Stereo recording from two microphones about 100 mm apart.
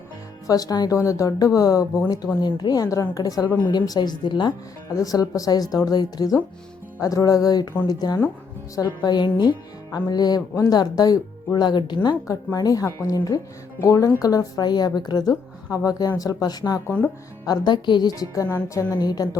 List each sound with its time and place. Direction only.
0.4 s a woman's voice: 40° left (ahead or behind)
4.9 s a woman's voice: 35° left (ahead or behind)
7.0 s a woman's voice: 35° left (ahead or behind); by 11.9 s 50° left (ahead or behind)
12.3 s a woman's voice: 35° left (ahead or behind)